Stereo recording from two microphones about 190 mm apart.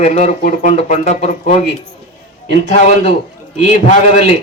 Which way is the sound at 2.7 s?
35° left (ahead or behind).